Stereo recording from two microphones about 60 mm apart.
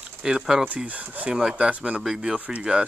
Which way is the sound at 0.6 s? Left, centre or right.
Right.